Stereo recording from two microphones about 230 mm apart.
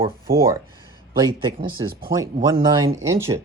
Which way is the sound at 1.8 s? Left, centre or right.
Centre.